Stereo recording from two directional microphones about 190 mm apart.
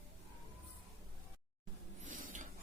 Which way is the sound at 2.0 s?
40° right (ahead or behind).